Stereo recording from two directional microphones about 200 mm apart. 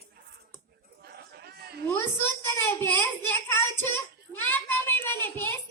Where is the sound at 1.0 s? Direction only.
50° right (ahead or behind).